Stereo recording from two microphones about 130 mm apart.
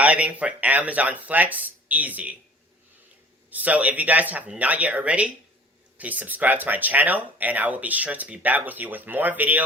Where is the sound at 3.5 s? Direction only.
10° right (ahead or behind).